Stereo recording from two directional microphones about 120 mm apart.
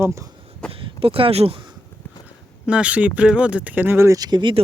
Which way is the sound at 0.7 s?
50° right (ahead or behind).